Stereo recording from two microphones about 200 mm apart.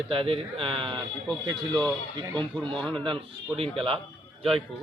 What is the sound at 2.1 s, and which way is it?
Speech, 20° right (ahead or behind).